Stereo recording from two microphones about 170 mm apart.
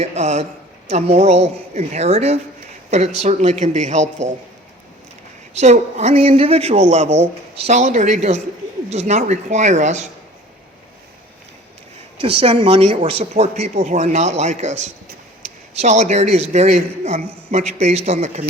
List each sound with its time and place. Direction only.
0.0 s a man's voice: 40° right (ahead or behind)
5.5 s a man's voice: 40° right (ahead or behind)
12.2 s a man's voice: 30° right (ahead or behind)